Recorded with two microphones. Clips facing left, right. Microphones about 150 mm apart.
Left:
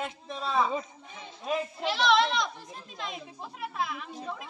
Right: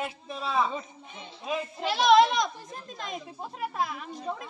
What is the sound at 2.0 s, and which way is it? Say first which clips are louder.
Speech: right 5 dB; 45° right (ahead or behind).